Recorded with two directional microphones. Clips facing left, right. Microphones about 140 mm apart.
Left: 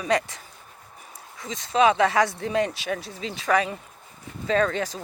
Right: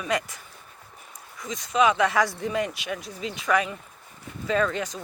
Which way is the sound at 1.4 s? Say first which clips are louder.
Left 2 dB; 30° left (ahead or behind).